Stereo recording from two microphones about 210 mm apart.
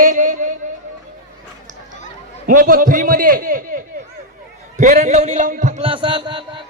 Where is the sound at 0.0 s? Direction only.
35° right (ahead or behind).